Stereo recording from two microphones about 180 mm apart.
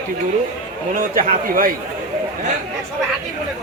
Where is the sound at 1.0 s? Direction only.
50° right (ahead or behind).